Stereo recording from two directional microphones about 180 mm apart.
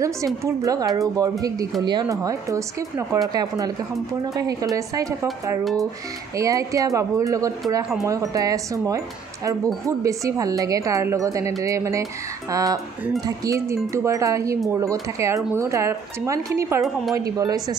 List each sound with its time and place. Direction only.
0.0 s a woman's voice: 15° right (ahead or behind)